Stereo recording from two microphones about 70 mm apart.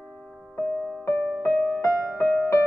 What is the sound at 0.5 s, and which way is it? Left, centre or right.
Music, left.